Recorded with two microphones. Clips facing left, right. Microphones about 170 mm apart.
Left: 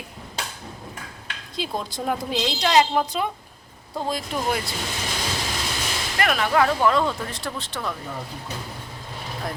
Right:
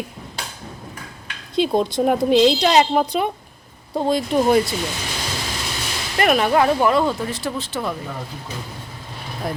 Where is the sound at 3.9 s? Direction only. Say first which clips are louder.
Right 9 dB; 25° right (ahead or behind).